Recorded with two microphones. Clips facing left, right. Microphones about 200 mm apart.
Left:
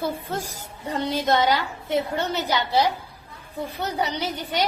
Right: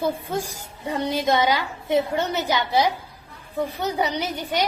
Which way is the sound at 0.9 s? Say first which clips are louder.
Right 1 dB; 15° right (ahead or behind).